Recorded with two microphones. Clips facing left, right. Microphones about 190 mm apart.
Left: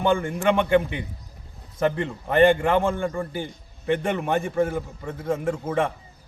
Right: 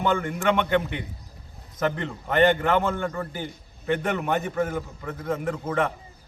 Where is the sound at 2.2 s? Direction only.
25° left (ahead or behind).